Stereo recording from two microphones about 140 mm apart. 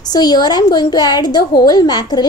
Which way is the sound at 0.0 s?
30° left (ahead or behind).